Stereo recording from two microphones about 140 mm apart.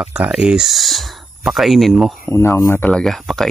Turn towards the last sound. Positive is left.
turn(degrees=5)  # may be behind; listen again after turning